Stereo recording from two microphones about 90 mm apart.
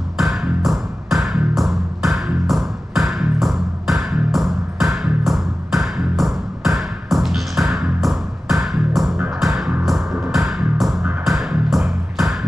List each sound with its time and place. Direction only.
0.2 s music: centre (ahead or behind)